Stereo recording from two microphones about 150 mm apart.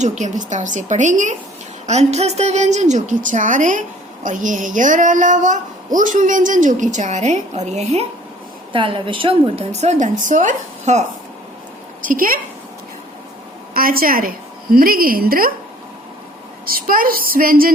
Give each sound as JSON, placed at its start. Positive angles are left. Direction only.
{"t": 0.0, "sound": "a woman's voice", "side_deg": -50}
{"t": 8.7, "sound": "a woman's voice", "side_deg": -35}
{"t": 10.0, "sound": "a woman's voice", "side_deg": -60}
{"t": 12.0, "sound": "a woman's voice", "side_deg": -70}
{"t": 13.7, "sound": "a woman's voice", "side_deg": -75}
{"t": 16.6, "sound": "a woman's voice", "side_deg": -75}